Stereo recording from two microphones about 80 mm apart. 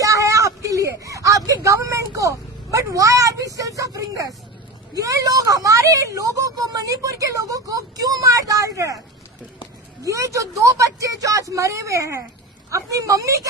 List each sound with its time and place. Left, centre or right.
0.0 s a sound: right
4.9 s a woman's voice: right
10.0 s speech: right